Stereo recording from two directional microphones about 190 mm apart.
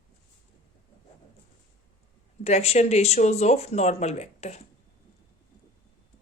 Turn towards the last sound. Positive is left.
turn(degrees=35)  # may be behind; listen again after turning